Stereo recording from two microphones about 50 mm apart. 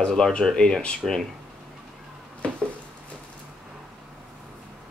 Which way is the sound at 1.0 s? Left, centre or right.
Centre.